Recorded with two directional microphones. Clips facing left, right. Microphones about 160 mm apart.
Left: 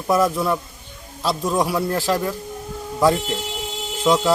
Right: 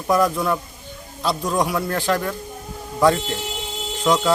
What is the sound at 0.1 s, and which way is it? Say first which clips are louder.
Speech: even; 5° left (ahead or behind).